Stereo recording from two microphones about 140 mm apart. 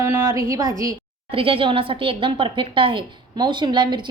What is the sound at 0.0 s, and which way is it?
Speech, 20° right (ahead or behind).